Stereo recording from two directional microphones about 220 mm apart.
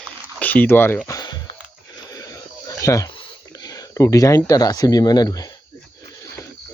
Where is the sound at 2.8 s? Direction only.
15° left (ahead or behind).